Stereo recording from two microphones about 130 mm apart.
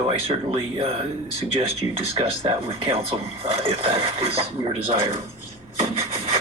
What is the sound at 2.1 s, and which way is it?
Speech, 45° right (ahead or behind).